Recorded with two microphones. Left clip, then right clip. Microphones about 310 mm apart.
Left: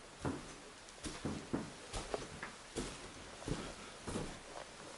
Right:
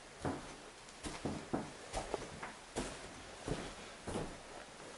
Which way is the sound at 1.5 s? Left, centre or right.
Centre.